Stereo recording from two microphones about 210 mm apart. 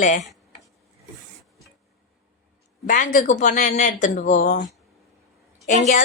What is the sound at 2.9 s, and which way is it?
A woman's voice, 35° left (ahead or behind).